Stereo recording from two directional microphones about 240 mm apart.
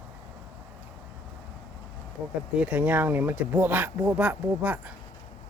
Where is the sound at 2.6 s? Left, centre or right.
Centre.